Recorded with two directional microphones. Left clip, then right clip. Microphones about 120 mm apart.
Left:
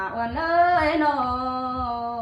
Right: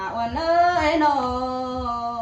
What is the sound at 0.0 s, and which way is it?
Female singing, 25° right (ahead or behind).